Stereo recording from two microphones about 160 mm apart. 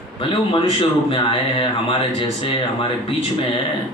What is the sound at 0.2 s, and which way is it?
Speech, 35° left (ahead or behind).